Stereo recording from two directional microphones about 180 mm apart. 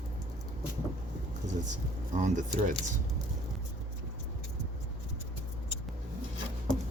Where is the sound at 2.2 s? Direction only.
45° right (ahead or behind).